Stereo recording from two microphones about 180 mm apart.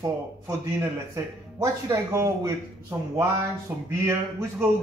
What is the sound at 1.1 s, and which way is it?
Speech, 15° right (ahead or behind).